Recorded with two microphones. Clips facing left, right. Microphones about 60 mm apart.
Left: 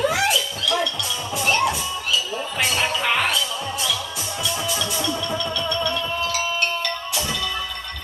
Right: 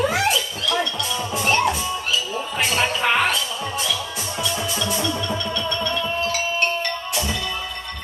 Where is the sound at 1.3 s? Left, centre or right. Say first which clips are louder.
Right 1 dB; right.